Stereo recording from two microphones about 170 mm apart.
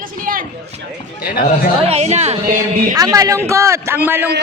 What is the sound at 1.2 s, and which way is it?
Speech, 65° left (ahead or behind).